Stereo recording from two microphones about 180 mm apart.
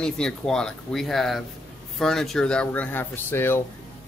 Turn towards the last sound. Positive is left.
turn(degrees=15)  # may be behind; listen again after turning